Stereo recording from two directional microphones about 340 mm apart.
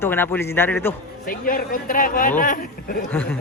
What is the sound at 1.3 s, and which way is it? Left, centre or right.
Speech, left.